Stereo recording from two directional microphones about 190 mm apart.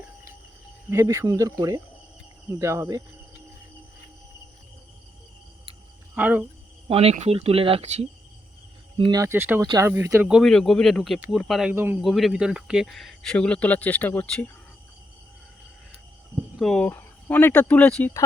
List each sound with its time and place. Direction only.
0.9 s speech: 15° right (ahead or behind)
6.1 s speech: 10° right (ahead or behind)
6.8 s speech: 30° right (ahead or behind)
9.0 s speech: 20° right (ahead or behind); by 11.7 s centre (ahead or behind)
11.7 s speech: 10° right (ahead or behind)
12.0 s speech: centre (ahead or behind)
16.3 s speech: centre (ahead or behind)